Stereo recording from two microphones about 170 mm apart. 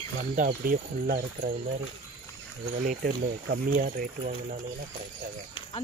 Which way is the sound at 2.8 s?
60° right (ahead or behind).